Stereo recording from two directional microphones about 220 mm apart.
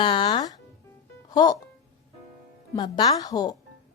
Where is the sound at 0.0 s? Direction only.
20° left (ahead or behind).